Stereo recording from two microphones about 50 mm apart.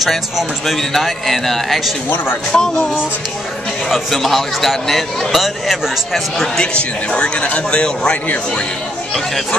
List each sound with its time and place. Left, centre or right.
0.0 s a man's voice: centre
2.5 s speech: centre
3.9 s a man's voice: centre
6.6 s a man's voice: centre